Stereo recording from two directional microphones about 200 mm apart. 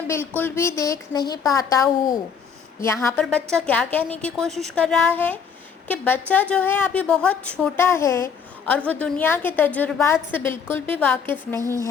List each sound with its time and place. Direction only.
0.1 s a woman's voice: 10° left (ahead or behind)